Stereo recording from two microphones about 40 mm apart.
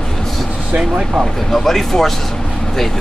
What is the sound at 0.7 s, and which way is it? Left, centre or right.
Speech, right.